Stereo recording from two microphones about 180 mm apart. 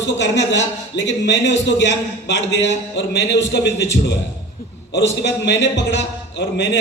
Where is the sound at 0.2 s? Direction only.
85° left.